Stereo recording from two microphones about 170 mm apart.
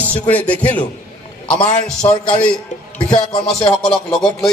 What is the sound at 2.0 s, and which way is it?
Speech, 20° left (ahead or behind).